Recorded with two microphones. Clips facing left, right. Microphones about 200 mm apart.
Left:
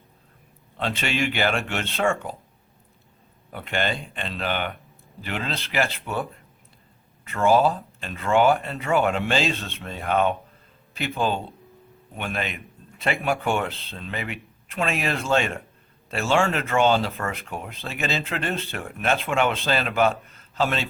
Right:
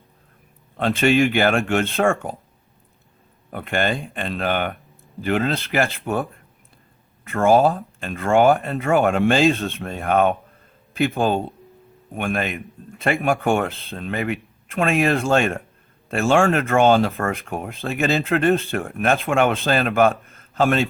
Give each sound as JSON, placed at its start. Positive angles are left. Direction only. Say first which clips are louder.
{"t": 0.8, "sound": "speech", "louder": "right 9 dB", "side_deg": -50}
{"t": 3.5, "sound": "speech", "louder": "right 4 dB", "side_deg": -50}
{"t": 7.3, "sound": "speech", "louder": "right 4 dB", "side_deg": -45}